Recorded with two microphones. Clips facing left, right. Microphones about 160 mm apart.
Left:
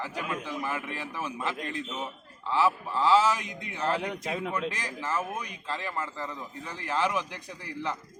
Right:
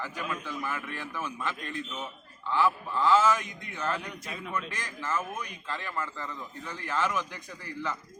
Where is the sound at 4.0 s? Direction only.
80° left.